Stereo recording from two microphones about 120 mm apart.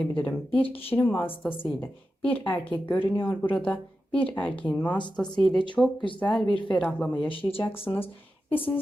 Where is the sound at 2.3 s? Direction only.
15° left (ahead or behind).